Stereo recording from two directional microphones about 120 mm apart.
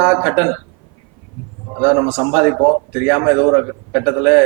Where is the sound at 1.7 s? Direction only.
15° right (ahead or behind).